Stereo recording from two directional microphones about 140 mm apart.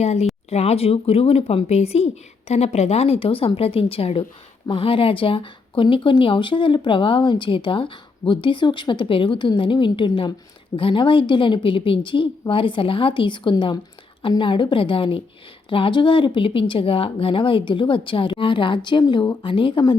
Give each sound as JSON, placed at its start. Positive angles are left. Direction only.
{"t": 0.0, "sound": "a woman's voice", "side_deg": 50}